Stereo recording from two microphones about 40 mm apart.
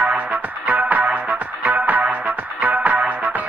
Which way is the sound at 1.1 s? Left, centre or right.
Right.